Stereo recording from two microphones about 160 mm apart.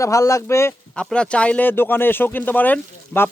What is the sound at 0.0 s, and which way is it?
Speech, 20° left (ahead or behind).